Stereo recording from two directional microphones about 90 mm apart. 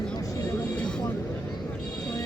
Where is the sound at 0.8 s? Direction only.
10° left (ahead or behind).